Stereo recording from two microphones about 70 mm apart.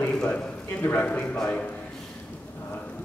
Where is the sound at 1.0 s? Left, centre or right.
Centre.